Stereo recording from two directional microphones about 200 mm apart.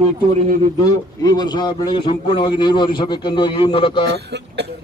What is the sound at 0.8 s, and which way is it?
A man's voice, 20° left (ahead or behind).